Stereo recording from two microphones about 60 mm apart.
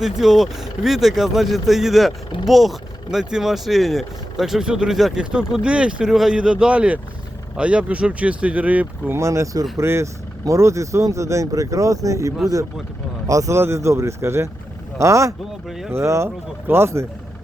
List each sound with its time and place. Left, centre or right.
0.0 s speech: centre
6.1 s speech: centre; by 8.9 s right
9.1 s speech: right
9.7 s speech: right
13.6 s speech: right